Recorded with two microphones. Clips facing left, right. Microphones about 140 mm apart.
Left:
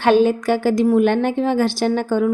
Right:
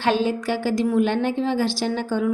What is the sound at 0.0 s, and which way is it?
A woman's voice, 55° left (ahead or behind).